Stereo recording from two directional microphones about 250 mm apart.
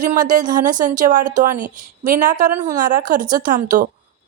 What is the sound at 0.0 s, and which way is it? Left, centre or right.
A woman's voice, right.